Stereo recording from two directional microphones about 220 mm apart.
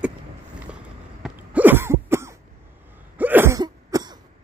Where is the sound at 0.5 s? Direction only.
5° right (ahead or behind).